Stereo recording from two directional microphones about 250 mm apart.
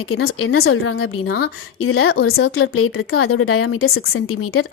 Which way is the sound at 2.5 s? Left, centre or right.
Left.